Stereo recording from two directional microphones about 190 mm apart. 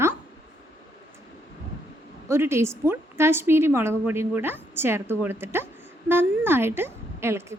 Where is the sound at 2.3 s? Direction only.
15° right (ahead or behind).